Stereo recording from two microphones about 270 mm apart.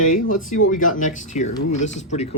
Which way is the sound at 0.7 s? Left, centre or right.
Left.